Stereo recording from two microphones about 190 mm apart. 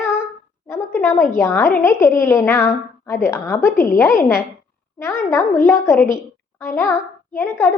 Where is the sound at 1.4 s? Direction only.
15° left (ahead or behind).